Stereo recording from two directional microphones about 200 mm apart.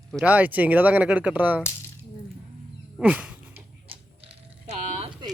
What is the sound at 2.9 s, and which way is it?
Dog, 5° right (ahead or behind).